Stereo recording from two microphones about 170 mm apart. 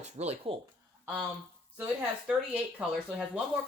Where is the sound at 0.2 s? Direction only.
35° right (ahead or behind).